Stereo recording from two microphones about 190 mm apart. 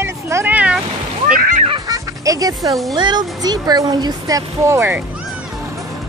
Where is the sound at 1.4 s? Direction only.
45° right (ahead or behind).